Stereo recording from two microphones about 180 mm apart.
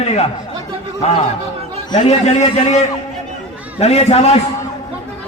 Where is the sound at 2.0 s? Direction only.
40° left (ahead or behind).